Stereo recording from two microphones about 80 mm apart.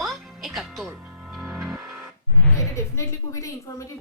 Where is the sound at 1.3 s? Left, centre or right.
Centre.